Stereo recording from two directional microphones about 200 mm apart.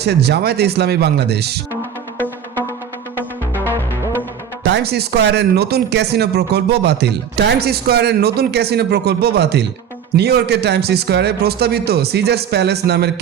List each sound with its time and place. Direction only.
0.0 s speech: 55° right (ahead or behind)
4.6 s speech: 55° right (ahead or behind)